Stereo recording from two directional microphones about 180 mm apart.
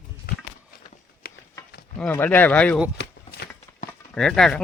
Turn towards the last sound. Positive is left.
turn(degrees=5)  # may be behind; listen again after turning